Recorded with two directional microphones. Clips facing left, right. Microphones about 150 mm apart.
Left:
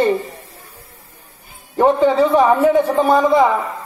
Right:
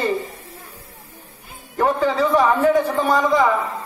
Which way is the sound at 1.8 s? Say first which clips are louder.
Left 6 dB; 25° left (ahead or behind).